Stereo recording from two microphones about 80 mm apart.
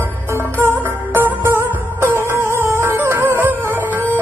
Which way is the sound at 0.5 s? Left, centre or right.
Right.